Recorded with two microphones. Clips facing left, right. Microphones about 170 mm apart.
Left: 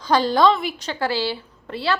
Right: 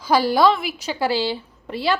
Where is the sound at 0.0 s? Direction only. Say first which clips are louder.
Even; 10° right (ahead or behind).